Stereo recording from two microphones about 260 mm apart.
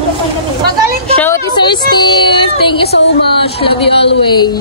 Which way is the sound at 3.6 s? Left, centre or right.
Centre.